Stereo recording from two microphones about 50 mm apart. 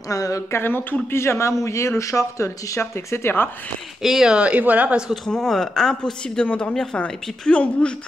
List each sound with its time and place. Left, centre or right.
0.6 s speech: left
1.1 s a man's voice: left
1.6 s speech: left
4.0 s speech: centre
4.3 s speech: right
5.1 s speech: centre
6.4 s a woman's voice: left
6.7 s speech: centre
7.0 s a woman's voice: left